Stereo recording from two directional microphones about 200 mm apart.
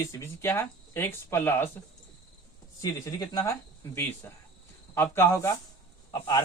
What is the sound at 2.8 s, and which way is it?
Speech, 15° left (ahead or behind).